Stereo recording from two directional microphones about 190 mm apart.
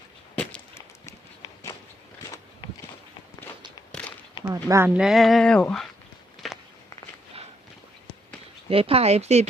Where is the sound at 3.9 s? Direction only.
5° left (ahead or behind).